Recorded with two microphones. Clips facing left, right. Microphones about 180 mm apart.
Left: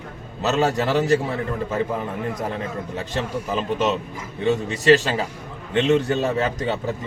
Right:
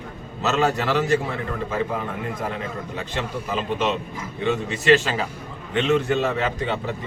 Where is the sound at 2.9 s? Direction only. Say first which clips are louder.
Left 3 dB; 40° left (ahead or behind).